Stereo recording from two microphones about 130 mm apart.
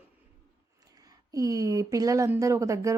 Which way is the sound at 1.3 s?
25° right (ahead or behind).